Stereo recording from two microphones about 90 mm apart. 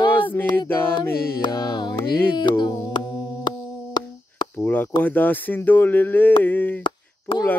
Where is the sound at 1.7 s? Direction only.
60° left (ahead or behind).